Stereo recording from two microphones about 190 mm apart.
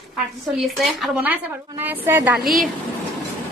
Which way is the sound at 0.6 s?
Centre (ahead or behind).